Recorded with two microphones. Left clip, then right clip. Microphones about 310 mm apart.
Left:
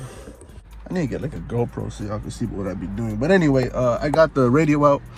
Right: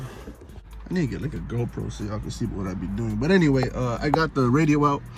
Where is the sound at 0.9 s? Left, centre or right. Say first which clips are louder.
Left 3 dB; centre.